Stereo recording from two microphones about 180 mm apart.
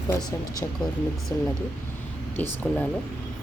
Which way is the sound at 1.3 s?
15° left (ahead or behind).